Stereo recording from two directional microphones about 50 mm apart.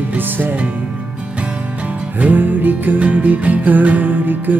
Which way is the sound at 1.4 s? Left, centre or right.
Right.